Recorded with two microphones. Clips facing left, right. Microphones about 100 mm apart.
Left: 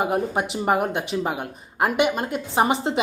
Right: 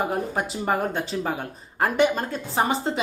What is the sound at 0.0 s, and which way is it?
A woman's voice, 20° left (ahead or behind).